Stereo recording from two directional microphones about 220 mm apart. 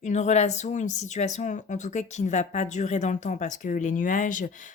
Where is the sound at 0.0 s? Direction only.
30° left (ahead or behind).